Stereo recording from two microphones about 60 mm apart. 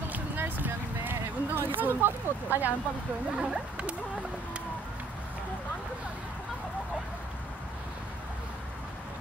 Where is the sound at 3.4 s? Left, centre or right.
Centre.